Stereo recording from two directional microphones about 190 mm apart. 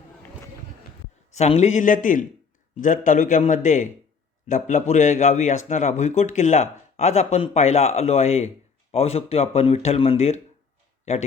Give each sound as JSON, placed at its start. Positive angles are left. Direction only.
{"t": 1.3, "sound": "a man's voice", "side_deg": 35}